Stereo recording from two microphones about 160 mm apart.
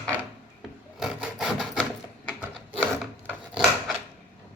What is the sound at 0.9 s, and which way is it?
Wood, 5° right (ahead or behind).